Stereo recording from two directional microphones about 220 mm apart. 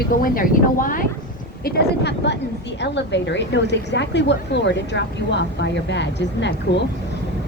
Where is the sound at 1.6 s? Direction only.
50° left (ahead or behind).